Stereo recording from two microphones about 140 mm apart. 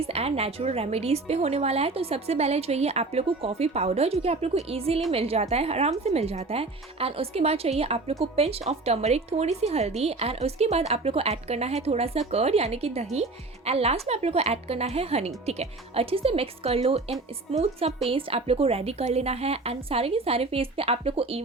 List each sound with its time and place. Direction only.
0.0 s a woman's voice: 45° right (ahead or behind)